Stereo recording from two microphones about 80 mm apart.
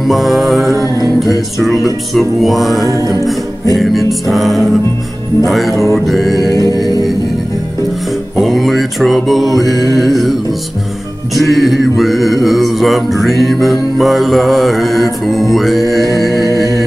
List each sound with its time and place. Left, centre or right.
0.0 s music: centre
2.9 s music: right
3.7 s music: centre
8.4 s mantra: centre
9.6 s music: centre